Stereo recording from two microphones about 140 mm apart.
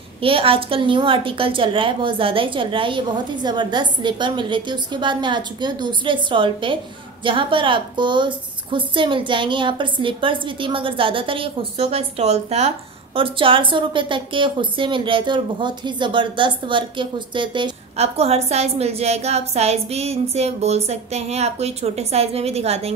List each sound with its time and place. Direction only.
0.2 s a woman's voice: 40° right (ahead or behind)
17.9 s a woman's voice: 50° right (ahead or behind)